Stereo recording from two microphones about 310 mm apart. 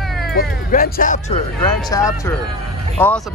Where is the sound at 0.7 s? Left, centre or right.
Left.